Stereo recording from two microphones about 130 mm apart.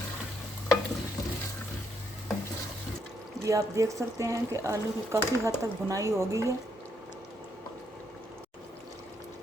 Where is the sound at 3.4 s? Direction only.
25° right (ahead or behind).